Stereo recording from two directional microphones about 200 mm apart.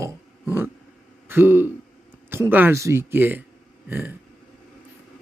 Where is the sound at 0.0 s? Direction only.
10° right (ahead or behind).